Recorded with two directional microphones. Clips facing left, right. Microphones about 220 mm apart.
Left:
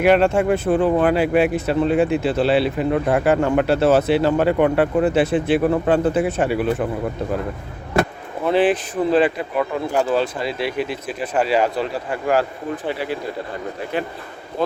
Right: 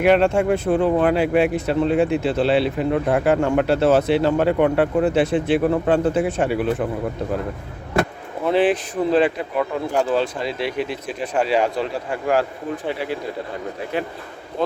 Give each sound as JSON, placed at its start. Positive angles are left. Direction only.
{"t": 0.0, "sound": "speech", "side_deg": 5}
{"t": 8.4, "sound": "speech", "side_deg": 0}